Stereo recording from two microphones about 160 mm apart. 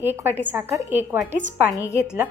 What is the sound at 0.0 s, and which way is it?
Speech, 15° right (ahead or behind).